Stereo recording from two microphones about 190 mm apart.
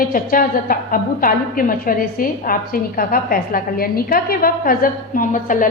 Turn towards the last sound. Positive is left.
turn(degrees=45)  # may be behind; listen again after turning